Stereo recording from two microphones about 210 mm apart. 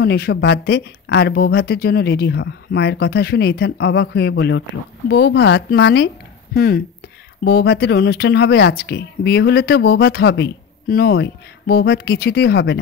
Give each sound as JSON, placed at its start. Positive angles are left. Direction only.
{"t": 0.0, "sound": "speech", "side_deg": 50}